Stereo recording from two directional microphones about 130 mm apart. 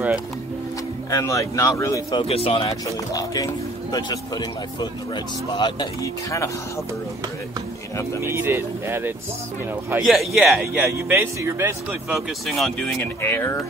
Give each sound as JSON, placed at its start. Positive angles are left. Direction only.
{"t": 1.1, "sound": "speech", "side_deg": 25}
{"t": 2.0, "sound": "speech", "side_deg": 50}
{"t": 3.1, "sound": "speech", "side_deg": 25}
{"t": 8.2, "sound": "speech", "side_deg": -20}
{"t": 10.0, "sound": "a man's voice", "side_deg": 0}
{"t": 10.9, "sound": "speech", "side_deg": -20}
{"t": 12.4, "sound": "a man's voice", "side_deg": 0}
{"t": 13.2, "sound": "speech", "side_deg": 20}